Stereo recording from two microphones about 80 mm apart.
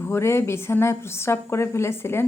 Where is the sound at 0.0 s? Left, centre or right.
Left.